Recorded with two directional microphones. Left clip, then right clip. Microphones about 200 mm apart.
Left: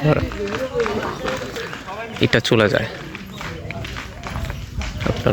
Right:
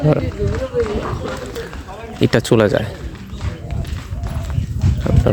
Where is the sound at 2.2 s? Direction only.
20° right (ahead or behind).